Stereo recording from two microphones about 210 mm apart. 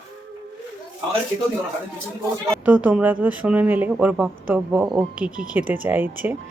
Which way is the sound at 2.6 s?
5° right (ahead or behind).